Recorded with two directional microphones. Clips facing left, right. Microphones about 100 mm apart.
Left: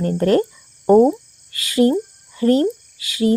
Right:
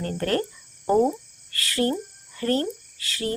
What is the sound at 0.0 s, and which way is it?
Speech, 20° left (ahead or behind).